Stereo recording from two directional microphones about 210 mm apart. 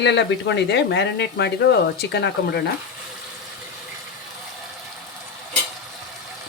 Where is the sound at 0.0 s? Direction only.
55° left (ahead or behind).